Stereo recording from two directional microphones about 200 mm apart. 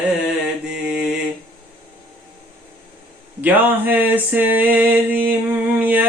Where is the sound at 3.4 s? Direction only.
10° right (ahead or behind).